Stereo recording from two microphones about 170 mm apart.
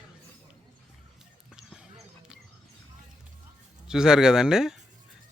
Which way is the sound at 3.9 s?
5° right (ahead or behind).